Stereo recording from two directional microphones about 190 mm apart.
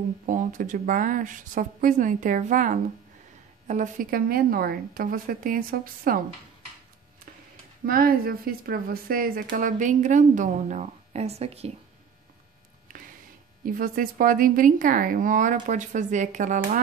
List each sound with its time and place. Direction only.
0.3 s speech: 45° right (ahead or behind)
7.8 s speech: 50° right (ahead or behind); by 11.7 s 35° right (ahead or behind)
13.7 s speech: 50° right (ahead or behind)